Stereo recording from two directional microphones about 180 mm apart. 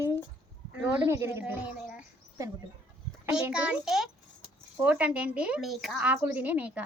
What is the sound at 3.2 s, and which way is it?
A child's voice, 10° right (ahead or behind).